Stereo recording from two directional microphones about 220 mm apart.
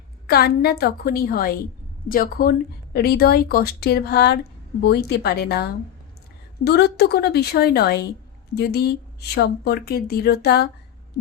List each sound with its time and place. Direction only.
0.3 s speech: 45° left (ahead or behind)